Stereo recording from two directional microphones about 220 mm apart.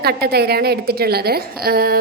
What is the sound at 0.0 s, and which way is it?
A woman's voice, 45° right (ahead or behind).